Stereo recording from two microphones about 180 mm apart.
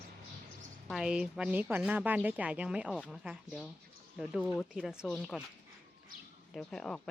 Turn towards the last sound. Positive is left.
turn(degrees=5)  # may be behind; listen again after turning